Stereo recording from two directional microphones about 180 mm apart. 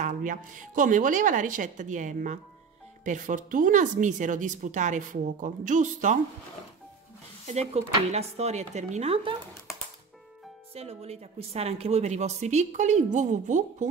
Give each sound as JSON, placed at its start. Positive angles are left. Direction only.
{"t": 0.0, "sound": "speech", "side_deg": -45}
{"t": 7.4, "sound": "speech", "side_deg": -35}
{"t": 10.7, "sound": "speech", "side_deg": -35}